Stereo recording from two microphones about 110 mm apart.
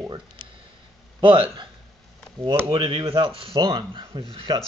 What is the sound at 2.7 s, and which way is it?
Speech, 45° right (ahead or behind).